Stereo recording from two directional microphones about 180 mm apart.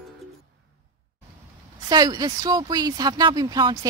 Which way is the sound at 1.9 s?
20° right (ahead or behind).